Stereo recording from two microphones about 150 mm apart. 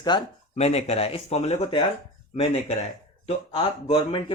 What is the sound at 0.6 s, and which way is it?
A man's voice, 45° left (ahead or behind).